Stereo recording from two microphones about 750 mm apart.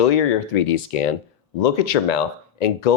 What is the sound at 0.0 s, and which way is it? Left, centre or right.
Speech, left.